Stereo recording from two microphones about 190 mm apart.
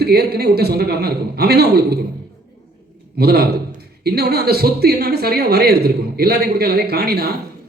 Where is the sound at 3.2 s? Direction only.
55° right (ahead or behind).